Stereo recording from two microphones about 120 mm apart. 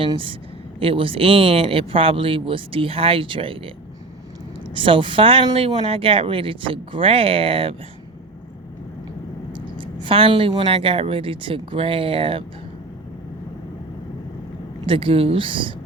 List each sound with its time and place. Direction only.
0.8 s speech: 50° right (ahead or behind)
4.7 s speech: 45° right (ahead or behind)
9.7 s speech: 45° right (ahead or behind)
14.8 s speech: 50° right (ahead or behind)